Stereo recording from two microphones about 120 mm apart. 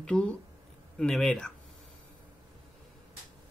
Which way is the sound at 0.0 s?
5° left (ahead or behind).